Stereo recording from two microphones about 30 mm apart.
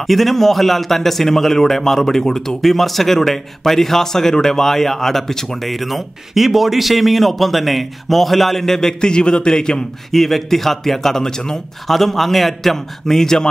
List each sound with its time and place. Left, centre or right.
0.0 s a man's voice: centre
2.6 s a man's voice: centre
5.7 s a man's voice: centre
9.0 s a man's voice: left
10.1 s a man's voice: centre
11.9 s a man's voice: centre